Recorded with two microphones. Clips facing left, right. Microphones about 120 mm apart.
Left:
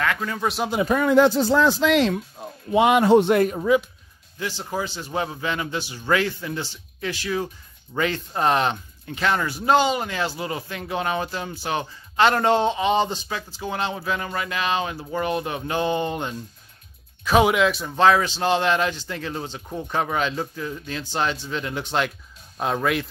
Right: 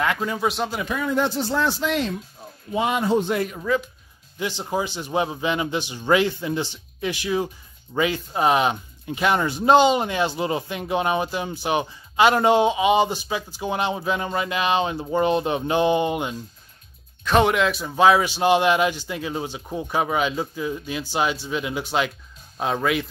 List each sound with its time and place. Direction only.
0.0 s speech: 20° right (ahead or behind)
0.4 s speech: centre (ahead or behind)
1.0 s speech: 90° left
2.4 s music: 85° left
2.7 s a man's voice: 70° left (ahead or behind)
4.4 s a man's voice: 20° right (ahead or behind)
17.2 s a man's voice: 5° left (ahead or behind)